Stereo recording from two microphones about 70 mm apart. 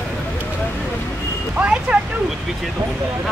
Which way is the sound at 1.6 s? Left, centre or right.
Centre.